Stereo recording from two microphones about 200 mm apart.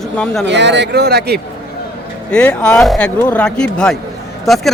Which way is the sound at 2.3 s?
5° left (ahead or behind).